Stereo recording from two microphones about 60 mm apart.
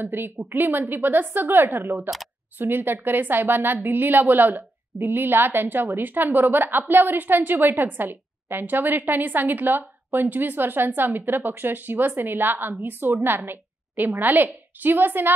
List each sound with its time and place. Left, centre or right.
0.0 s a woman's voice: right